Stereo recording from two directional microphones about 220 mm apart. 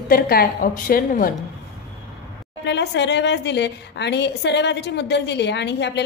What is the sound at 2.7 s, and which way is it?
A woman's voice, 50° left (ahead or behind).